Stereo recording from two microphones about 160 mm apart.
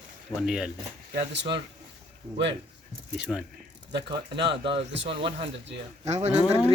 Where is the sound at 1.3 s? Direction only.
90° right.